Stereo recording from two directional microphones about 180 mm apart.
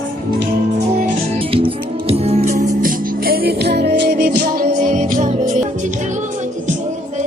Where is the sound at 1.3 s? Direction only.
30° right (ahead or behind).